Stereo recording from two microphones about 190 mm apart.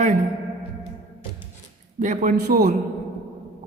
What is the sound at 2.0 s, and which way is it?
Speech, 45° right (ahead or behind).